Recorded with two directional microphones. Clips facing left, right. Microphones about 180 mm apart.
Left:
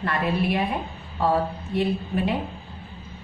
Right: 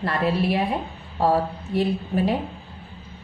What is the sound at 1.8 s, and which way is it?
Speech, 35° right (ahead or behind).